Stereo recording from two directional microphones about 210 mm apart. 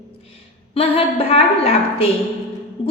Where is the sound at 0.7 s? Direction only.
25° left (ahead or behind).